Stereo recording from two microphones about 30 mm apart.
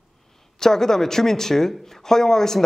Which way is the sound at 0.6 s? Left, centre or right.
Centre.